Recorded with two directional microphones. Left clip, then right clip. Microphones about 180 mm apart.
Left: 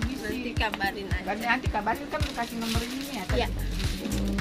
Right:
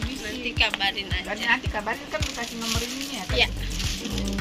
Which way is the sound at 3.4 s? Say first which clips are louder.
Right 7 dB; 35° left (ahead or behind).